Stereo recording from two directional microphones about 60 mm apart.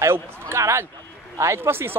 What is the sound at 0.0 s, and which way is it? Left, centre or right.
A man's voice, right.